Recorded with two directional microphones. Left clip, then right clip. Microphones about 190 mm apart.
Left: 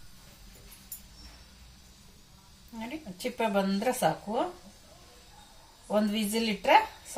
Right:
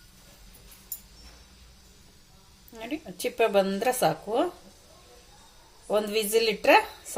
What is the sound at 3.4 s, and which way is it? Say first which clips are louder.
Speech: right 6 dB; 55° right (ahead or behind).